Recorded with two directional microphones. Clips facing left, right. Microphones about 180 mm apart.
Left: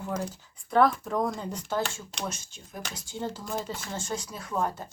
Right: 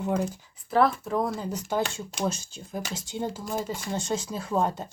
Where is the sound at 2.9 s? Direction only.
20° right (ahead or behind).